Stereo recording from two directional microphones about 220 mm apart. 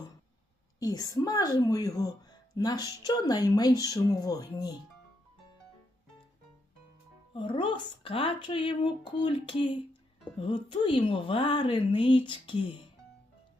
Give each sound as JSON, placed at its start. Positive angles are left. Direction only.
{"t": 0.8, "sound": "a woman's voice", "side_deg": 15}
{"t": 7.3, "sound": "speech", "side_deg": 20}